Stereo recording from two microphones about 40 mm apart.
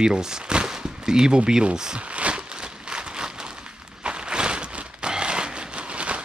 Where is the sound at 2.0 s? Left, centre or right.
Right.